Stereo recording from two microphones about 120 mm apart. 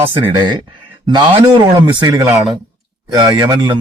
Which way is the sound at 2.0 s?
40° right (ahead or behind).